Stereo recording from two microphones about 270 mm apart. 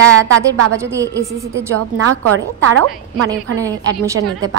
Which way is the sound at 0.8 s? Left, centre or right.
Centre.